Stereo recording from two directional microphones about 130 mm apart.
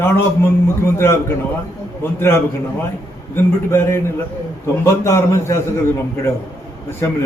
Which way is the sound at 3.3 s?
20° left (ahead or behind).